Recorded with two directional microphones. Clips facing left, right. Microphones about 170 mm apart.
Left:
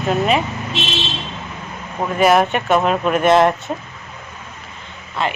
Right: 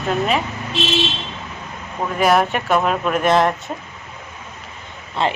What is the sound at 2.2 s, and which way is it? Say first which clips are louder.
Speech: left 2 dB; centre (ahead or behind).